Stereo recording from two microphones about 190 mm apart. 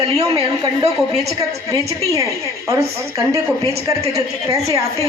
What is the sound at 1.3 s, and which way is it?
A man's voice, 20° right (ahead or behind).